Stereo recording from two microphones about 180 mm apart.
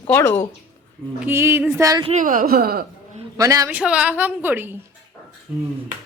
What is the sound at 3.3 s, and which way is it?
Speech, 20° right (ahead or behind).